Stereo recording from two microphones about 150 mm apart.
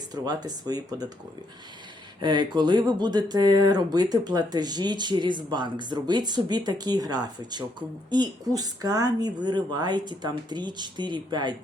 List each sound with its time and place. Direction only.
0.1 s speech: 25° right (ahead or behind)
2.2 s speech: 30° right (ahead or behind)